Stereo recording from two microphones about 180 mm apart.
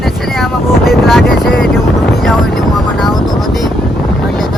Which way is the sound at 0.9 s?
Centre (ahead or behind).